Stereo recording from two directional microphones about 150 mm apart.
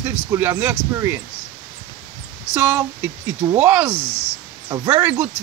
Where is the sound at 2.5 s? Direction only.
15° right (ahead or behind).